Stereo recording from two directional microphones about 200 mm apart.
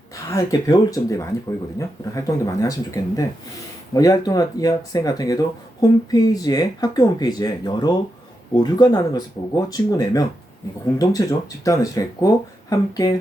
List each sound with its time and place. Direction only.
0.3 s speech: 15° left (ahead or behind)